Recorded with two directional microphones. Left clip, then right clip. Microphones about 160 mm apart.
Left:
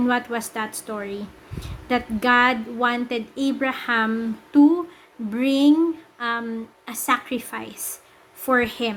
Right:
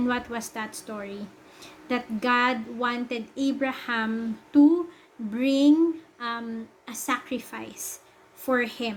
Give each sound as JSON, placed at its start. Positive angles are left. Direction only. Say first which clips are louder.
{"t": 0.0, "sound": "a woman's voice", "louder": "left 6 dB", "side_deg": 10}